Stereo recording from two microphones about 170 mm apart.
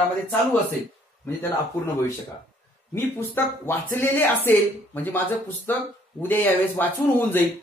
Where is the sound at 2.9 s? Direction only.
10° left (ahead or behind).